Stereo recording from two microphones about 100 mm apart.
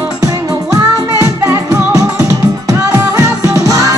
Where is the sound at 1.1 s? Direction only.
30° right (ahead or behind).